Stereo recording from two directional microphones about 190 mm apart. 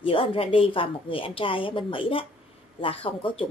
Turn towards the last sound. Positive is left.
turn(degrees=30)  # may be behind; listen again after turning